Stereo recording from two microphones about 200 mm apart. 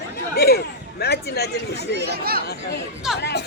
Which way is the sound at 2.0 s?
50° right (ahead or behind).